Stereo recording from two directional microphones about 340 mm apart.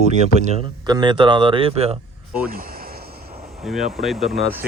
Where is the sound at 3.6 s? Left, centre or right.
Centre.